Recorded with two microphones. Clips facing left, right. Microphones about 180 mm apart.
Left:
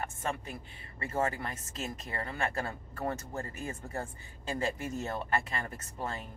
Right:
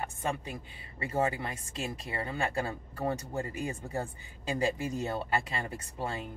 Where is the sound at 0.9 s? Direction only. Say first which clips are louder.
Right 2 dB; 15° right (ahead or behind).